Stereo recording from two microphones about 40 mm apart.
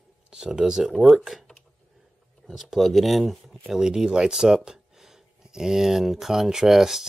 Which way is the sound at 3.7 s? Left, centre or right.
Centre.